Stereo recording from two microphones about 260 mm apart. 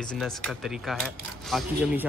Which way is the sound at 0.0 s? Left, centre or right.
Centre.